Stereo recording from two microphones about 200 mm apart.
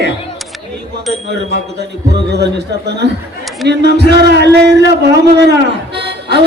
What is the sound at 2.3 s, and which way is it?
Speech, 55° right (ahead or behind).